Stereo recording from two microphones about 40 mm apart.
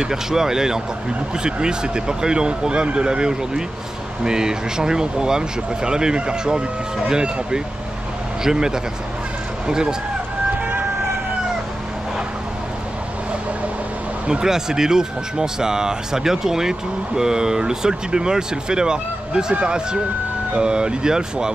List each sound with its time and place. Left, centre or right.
0.0 s speech: centre
10.6 s vehicle: right
14.2 s speech: centre